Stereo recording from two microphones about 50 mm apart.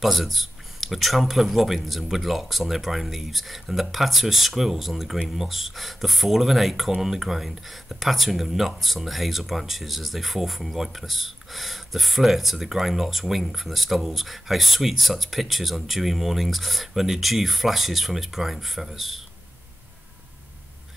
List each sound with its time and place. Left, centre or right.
0.0 s speech: centre